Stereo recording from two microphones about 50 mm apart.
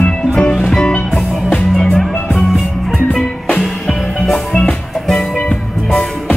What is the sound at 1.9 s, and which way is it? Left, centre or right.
Music, centre.